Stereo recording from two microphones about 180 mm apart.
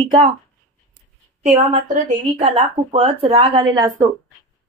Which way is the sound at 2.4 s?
35° right (ahead or behind).